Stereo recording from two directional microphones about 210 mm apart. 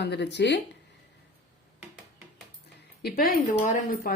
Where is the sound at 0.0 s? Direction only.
55° left (ahead or behind).